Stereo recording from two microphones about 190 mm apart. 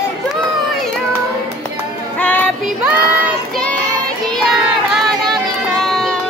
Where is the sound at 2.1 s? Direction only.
5° left (ahead or behind).